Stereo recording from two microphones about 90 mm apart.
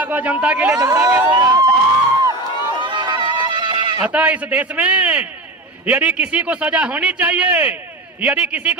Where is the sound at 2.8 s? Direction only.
60° right (ahead or behind).